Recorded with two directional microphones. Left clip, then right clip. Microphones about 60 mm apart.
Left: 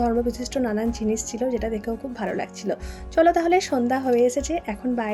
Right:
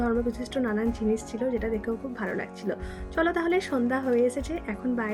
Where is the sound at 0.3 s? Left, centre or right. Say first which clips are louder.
Left 4 dB; left.